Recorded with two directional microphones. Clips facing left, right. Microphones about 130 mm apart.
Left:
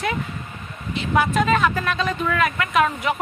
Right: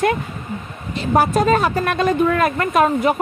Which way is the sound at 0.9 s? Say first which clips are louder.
Right 4 dB; 40° right (ahead or behind).